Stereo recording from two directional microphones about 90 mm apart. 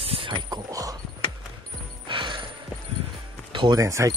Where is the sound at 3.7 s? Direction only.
35° right (ahead or behind).